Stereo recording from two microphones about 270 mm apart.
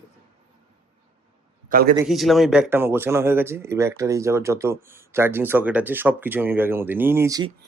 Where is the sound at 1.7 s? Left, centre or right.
Right.